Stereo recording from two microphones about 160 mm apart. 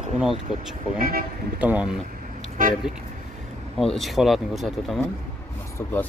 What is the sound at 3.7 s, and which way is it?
Speech, centre (ahead or behind).